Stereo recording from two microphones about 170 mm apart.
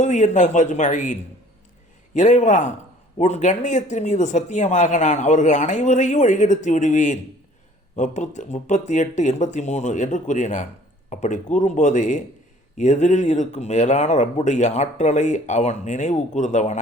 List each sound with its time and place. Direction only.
0.0 s speech: 45° left (ahead or behind)